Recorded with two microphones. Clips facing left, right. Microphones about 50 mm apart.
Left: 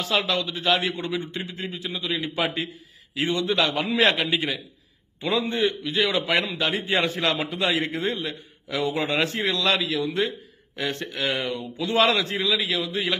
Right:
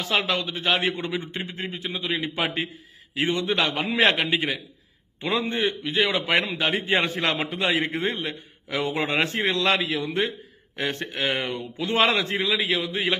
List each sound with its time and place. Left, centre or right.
0.3 s a man's voice: right
7.7 s a man's voice: centre
8.0 s a man's voice: right